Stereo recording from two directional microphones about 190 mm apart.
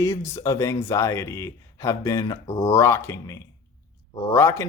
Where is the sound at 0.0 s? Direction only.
15° left (ahead or behind).